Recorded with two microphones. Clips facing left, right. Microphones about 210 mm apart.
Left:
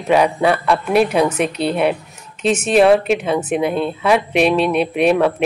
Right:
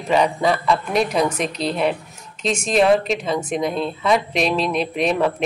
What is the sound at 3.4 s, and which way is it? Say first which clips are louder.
A woman's voice: left 4 dB; 5° left (ahead or behind).